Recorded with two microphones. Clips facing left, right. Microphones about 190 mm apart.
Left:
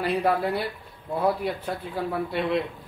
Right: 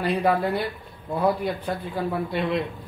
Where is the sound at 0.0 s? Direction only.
5° left (ahead or behind).